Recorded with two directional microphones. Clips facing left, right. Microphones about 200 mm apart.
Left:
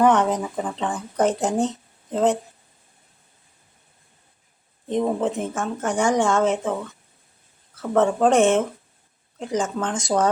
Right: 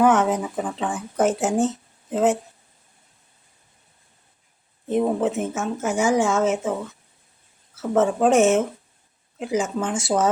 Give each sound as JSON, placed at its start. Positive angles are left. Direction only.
{"t": 0.0, "sound": "speech", "side_deg": -5}
{"t": 4.9, "sound": "speech", "side_deg": -5}
{"t": 7.8, "sound": "speech", "side_deg": -5}